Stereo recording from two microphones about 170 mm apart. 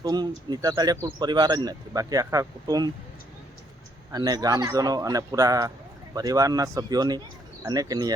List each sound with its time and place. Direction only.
0.0 s a man's voice: 25° right (ahead or behind)
4.1 s a man's voice: 25° right (ahead or behind)